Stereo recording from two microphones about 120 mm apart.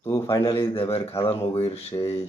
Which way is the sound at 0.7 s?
50° left (ahead or behind).